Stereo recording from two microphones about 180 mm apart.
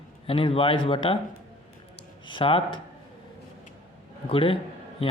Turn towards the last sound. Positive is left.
turn(degrees=30)  # may be behind; listen again after turning